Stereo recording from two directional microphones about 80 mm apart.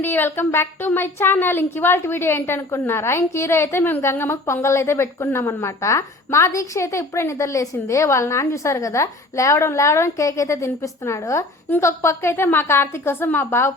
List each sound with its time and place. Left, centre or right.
0.0 s a woman's voice: left